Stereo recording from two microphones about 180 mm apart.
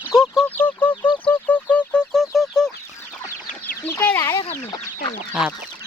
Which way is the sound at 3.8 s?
10° left (ahead or behind).